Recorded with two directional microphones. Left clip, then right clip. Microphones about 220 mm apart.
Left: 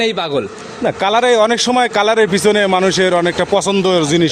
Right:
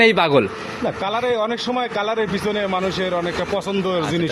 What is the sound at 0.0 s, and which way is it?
Speech, 10° right (ahead or behind).